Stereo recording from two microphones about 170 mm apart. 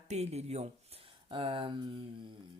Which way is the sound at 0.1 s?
40° right (ahead or behind).